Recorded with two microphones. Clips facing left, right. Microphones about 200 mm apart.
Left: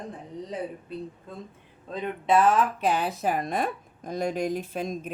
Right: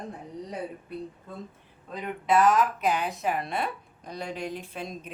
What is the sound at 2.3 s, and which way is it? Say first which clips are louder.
A woman's voice: left 1 dB; 30° left (ahead or behind).